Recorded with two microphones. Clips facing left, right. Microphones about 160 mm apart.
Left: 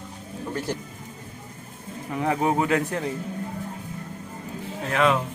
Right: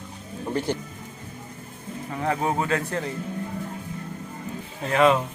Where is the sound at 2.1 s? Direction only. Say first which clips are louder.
Left 2 dB; 15° left (ahead or behind).